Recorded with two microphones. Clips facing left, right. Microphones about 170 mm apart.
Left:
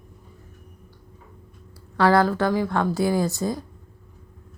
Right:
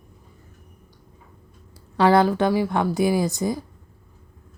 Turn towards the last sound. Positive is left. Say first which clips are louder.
# right 1 dB
turn(degrees=-15)  # may be behind; listen again after turning